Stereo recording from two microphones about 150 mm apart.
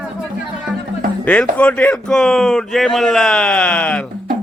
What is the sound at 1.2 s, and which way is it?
Speech, 10° left (ahead or behind).